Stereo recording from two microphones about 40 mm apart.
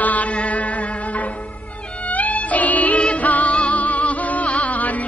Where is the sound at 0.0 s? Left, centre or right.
Left.